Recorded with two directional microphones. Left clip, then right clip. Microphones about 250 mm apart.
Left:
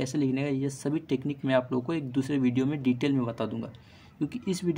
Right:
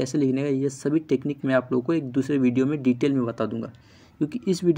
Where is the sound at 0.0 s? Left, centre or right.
Centre.